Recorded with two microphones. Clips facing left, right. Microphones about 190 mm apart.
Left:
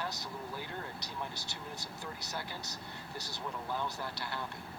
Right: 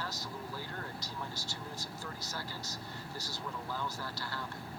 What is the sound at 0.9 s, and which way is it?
Speech, 65° left (ahead or behind).